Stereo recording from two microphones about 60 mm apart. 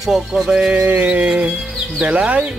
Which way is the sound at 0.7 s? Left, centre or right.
Right.